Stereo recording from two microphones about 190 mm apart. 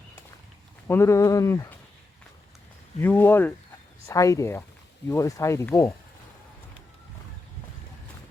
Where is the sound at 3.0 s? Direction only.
10° left (ahead or behind).